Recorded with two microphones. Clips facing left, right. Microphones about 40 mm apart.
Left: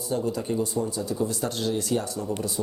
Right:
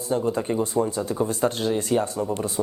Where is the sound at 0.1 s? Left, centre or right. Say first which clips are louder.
Right 3 dB; right.